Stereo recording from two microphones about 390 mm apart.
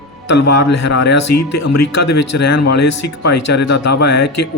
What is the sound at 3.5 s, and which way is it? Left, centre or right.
Speech, left.